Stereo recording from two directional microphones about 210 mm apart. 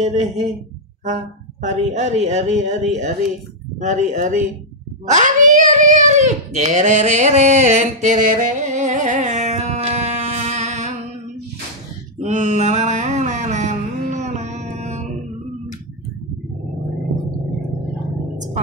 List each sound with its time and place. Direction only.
0.0 s a child's voice: 35° right (ahead or behind)
12.2 s mantra: 35° right (ahead or behind)